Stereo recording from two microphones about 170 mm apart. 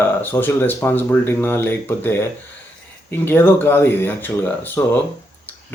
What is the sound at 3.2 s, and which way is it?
A man's voice, 10° left (ahead or behind).